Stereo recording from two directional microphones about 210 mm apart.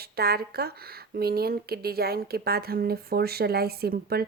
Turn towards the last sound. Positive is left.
turn(degrees=-45)  # may be behind; listen again after turning